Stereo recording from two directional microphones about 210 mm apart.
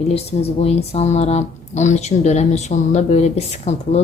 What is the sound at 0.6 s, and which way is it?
Speech, 30° left (ahead or behind).